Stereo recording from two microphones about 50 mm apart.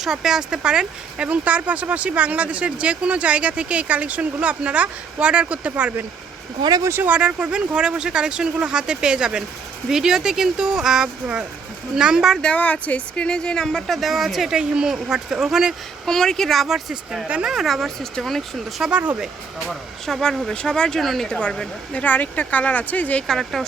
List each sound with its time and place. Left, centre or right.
0.0 s speech: centre; by 5.9 s right
7.1 s speech: right; by 12.4 s centre
12.5 s speech: left; by 15.7 s centre
16.0 s speech: centre
19.6 s speech: centre
20.5 s speech: centre
21.2 s speech: left
21.9 s speech: left
23.2 s speech: centre